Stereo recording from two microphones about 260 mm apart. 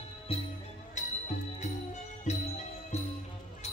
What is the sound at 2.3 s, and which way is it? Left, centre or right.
Music, left.